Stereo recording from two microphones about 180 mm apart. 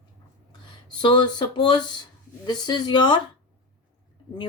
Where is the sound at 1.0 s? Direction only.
25° left (ahead or behind).